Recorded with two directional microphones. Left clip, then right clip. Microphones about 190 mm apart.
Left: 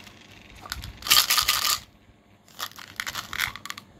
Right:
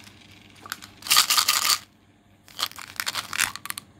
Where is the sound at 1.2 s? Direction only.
10° right (ahead or behind).